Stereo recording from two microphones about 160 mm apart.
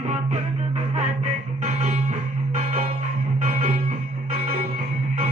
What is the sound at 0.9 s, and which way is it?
Music, 45° right (ahead or behind).